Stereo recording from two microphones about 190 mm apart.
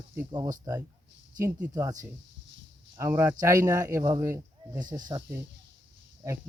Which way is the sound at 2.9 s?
15° right (ahead or behind).